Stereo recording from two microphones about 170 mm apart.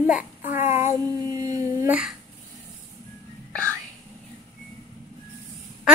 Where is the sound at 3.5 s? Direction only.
5° left (ahead or behind).